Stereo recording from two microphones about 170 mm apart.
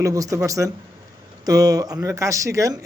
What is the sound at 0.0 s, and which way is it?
Speech, 20° right (ahead or behind).